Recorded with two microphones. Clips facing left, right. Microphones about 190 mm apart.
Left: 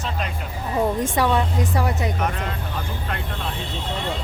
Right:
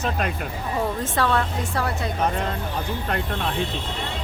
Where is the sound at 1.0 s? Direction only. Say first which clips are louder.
Left 2 dB; 15° left (ahead or behind).